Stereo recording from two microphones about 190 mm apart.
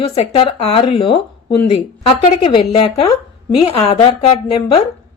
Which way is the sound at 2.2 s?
30° left (ahead or behind).